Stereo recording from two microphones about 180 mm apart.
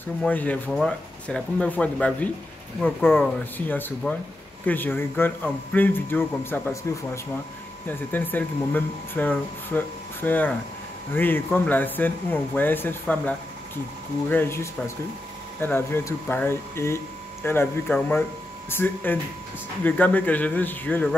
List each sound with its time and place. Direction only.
0.2 s speech: 10° left (ahead or behind)
3.5 s speech: 10° left (ahead or behind)
8.1 s speech: 10° left (ahead or behind)
14.3 s speech: 15° left (ahead or behind)